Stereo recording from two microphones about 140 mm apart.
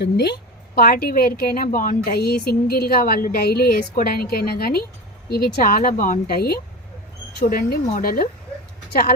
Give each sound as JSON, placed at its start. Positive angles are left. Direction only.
{"t": 0.8, "sound": "a woman's voice", "side_deg": 90}